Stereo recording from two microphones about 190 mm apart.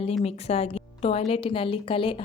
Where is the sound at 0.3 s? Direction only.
35° left (ahead or behind).